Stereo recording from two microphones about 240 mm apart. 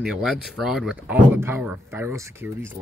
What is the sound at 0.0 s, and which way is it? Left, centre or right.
Speech, centre.